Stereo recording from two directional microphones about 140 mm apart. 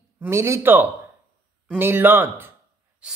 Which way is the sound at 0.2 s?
20° right (ahead or behind).